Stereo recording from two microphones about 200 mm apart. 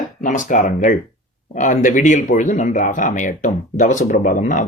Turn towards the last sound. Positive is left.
turn(degrees=40)  # may be behind; listen again after turning